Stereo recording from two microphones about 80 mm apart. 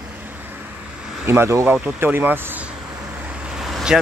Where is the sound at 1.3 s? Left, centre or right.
Right.